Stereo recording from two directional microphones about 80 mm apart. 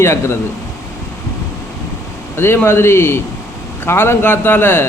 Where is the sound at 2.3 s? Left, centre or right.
Left.